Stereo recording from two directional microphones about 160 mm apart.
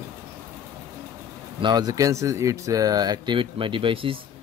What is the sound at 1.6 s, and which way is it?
Speech, 25° right (ahead or behind).